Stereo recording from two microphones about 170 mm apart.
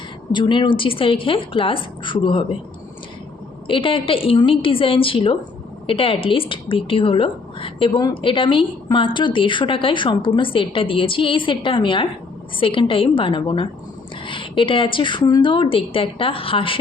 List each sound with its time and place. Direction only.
0.3 s a woman's voice: 30° left (ahead or behind)
3.7 s a woman's voice: 30° left (ahead or behind)